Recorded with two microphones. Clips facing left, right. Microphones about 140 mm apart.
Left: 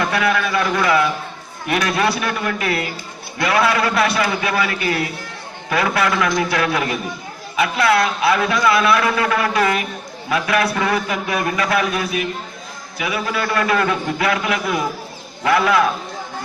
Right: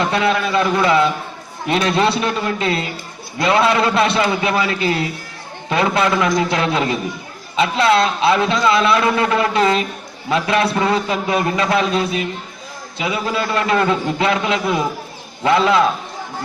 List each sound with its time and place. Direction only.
0.0 s a man's voice: 25° right (ahead or behind)